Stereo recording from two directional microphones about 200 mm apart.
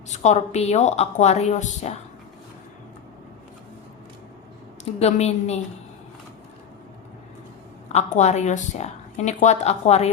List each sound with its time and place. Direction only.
0.1 s a woman's voice: 35° left (ahead or behind)
4.9 s a woman's voice: 30° left (ahead or behind)
7.9 s a woman's voice: 35° left (ahead or behind)